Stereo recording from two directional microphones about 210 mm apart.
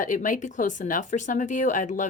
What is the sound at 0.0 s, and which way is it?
Speech, 40° left (ahead or behind).